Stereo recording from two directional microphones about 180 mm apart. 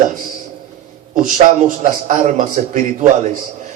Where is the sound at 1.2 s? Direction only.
45° right (ahead or behind).